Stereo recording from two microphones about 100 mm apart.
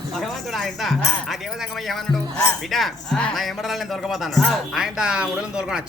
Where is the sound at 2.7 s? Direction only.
5° left (ahead or behind).